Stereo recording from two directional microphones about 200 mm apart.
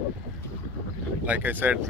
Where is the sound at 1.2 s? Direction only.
10° right (ahead or behind).